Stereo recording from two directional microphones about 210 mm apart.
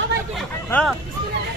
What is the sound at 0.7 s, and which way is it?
Speech, 5° left (ahead or behind).